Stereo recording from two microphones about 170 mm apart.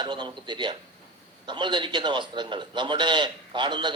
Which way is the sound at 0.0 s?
25° right (ahead or behind).